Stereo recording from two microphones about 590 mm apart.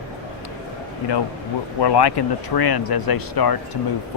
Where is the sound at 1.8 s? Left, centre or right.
Left.